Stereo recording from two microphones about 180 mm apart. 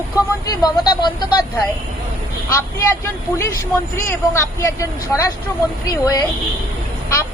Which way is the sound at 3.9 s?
15° left (ahead or behind).